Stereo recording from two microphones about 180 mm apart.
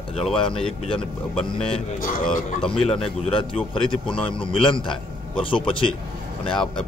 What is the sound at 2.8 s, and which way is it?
A man's voice, 30° left (ahead or behind).